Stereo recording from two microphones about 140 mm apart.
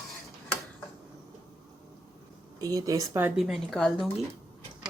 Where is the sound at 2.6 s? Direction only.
25° right (ahead or behind).